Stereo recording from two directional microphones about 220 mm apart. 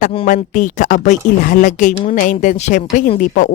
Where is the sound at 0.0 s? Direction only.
30° left (ahead or behind).